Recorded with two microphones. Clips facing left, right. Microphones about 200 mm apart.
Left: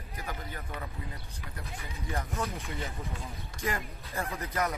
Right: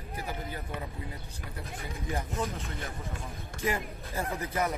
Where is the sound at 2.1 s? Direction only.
15° right (ahead or behind).